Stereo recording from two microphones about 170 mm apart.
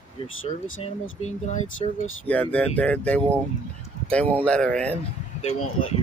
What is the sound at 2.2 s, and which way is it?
Speech, 10° left (ahead or behind).